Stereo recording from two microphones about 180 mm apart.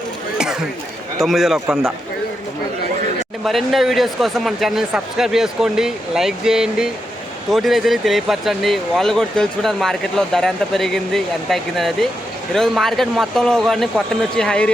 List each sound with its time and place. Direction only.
1.2 s speech: centre (ahead or behind)
3.4 s speech: centre (ahead or behind)